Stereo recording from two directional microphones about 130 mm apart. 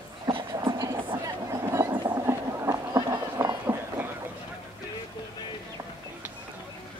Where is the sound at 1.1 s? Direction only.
25° right (ahead or behind).